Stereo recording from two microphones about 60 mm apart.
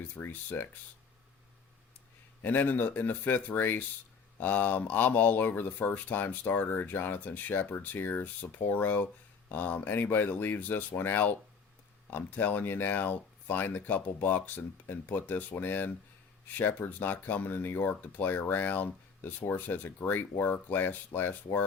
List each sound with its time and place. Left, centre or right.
0.2 s speech: left
2.4 s speech: left